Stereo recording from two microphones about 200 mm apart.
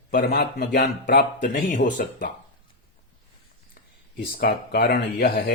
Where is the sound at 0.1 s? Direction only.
50° left (ahead or behind).